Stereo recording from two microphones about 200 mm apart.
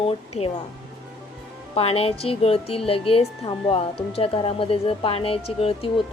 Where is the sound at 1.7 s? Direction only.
30° left (ahead or behind).